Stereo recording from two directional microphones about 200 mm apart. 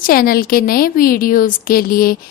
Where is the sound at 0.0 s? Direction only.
45° left (ahead or behind).